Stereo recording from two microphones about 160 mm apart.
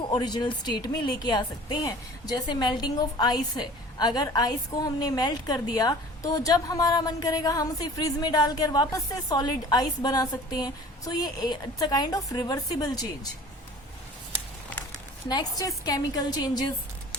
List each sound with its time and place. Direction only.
0.1 s a woman's voice: 25° left (ahead or behind)
15.3 s a woman's voice: 25° left (ahead or behind)